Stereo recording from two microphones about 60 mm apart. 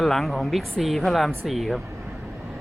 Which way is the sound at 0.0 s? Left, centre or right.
Centre.